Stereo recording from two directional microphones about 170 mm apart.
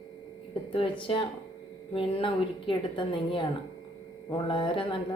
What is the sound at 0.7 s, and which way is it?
A woman's voice, 30° left (ahead or behind).